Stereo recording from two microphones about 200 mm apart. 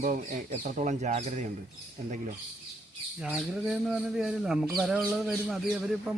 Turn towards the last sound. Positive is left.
turn(degrees=0)  # may be behind; listen again after turning